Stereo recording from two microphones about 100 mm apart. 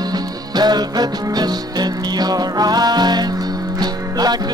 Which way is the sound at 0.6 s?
45° right (ahead or behind).